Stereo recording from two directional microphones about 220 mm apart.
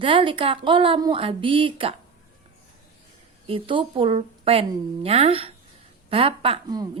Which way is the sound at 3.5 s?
25° right (ahead or behind).